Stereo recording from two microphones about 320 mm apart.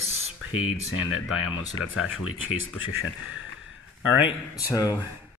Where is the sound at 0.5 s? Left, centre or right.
Left.